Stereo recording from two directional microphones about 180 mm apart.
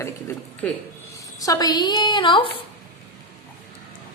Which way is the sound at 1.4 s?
20° left (ahead or behind).